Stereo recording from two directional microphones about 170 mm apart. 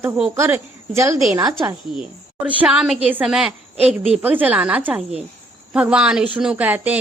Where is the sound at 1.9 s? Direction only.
10° right (ahead or behind).